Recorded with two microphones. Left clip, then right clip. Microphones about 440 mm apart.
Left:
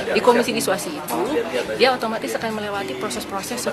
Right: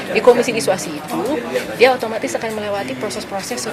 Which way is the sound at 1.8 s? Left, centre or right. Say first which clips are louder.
Right 5 dB; right.